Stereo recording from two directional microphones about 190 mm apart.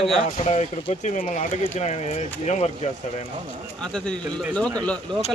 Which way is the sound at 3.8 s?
5° left (ahead or behind).